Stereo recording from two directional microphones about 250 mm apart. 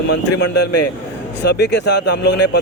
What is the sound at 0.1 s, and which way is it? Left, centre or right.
Speech, left.